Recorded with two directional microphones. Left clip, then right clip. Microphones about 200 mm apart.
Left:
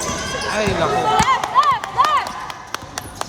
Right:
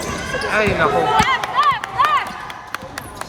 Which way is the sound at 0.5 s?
10° left (ahead or behind).